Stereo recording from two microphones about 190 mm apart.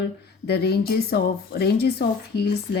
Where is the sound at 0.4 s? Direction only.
55° left (ahead or behind).